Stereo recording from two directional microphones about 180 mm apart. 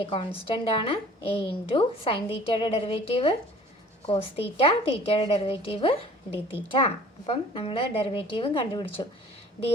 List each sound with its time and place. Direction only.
0.0 s a woman's voice: 30° left (ahead or behind)